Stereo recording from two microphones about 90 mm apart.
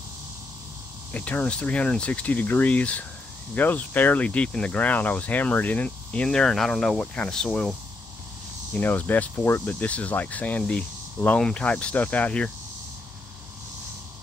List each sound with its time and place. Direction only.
1.1 s speech: 15° left (ahead or behind)
8.7 s speech: 20° left (ahead or behind)